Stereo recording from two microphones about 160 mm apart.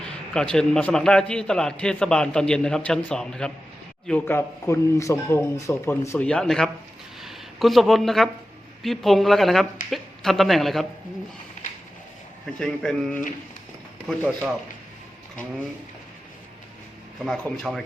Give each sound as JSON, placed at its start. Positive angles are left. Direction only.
{"t": 0.0, "sound": "a man's voice", "side_deg": 5}
{"t": 6.2, "sound": "a man's voice", "side_deg": 5}
{"t": 7.2, "sound": "a sound", "side_deg": 0}
{"t": 8.8, "sound": "a man's voice", "side_deg": 0}
{"t": 12.5, "sound": "a man's voice", "side_deg": 5}
{"t": 17.2, "sound": "a man's voice", "side_deg": 0}